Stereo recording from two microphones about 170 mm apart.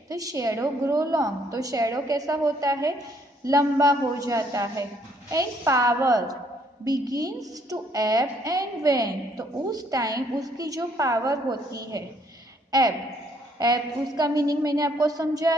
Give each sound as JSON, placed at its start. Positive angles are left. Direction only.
{"t": 0.1, "sound": "a woman's voice", "side_deg": -20}
{"t": 13.6, "sound": "a woman's voice", "side_deg": -25}